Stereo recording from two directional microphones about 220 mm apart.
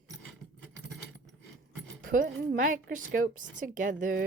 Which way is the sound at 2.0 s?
40° right (ahead or behind).